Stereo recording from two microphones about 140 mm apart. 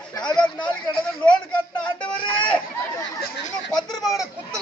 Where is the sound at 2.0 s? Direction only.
10° left (ahead or behind).